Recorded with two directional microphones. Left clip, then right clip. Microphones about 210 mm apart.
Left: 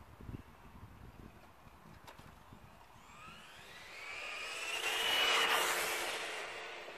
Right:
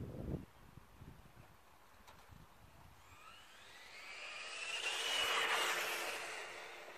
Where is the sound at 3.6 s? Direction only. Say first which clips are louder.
Left 5 dB; 20° left (ahead or behind); by 5.6 s 45° left (ahead or behind).